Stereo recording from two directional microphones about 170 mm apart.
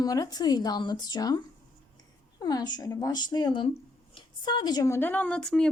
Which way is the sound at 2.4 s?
25° left (ahead or behind).